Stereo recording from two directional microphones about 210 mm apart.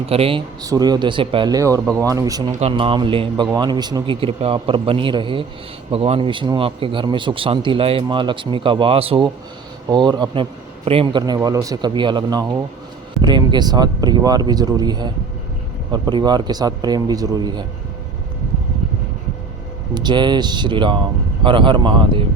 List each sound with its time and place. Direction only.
0.1 s a man's voice: 25° right (ahead or behind)
2.6 s a man's voice: 30° right (ahead or behind)
19.9 s a man's voice: 20° right (ahead or behind)